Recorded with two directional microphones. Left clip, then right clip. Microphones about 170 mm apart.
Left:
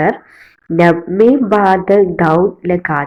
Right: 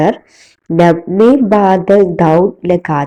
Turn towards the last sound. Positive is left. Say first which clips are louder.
# right 2 dB
turn(degrees=-35)  # may be behind; listen again after turning